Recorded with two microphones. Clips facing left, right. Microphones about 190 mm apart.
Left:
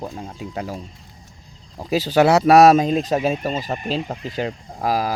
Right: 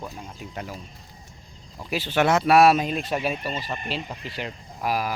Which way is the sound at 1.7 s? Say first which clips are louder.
Left 7 dB; 40° left (ahead or behind).